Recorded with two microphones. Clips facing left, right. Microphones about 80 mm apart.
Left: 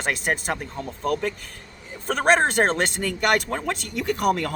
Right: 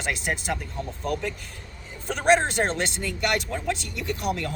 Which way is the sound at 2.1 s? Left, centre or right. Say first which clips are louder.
Left 2 dB; left.